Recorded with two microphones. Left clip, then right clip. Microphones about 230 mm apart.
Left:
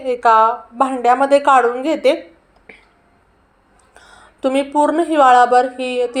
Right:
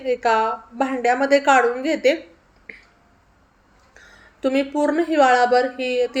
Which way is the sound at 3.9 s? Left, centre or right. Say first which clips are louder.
Left 4 dB; centre.